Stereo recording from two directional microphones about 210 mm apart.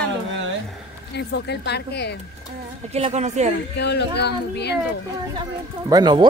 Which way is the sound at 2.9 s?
30° right (ahead or behind).